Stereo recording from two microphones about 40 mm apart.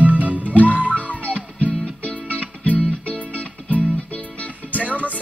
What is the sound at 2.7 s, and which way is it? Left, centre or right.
Music, right.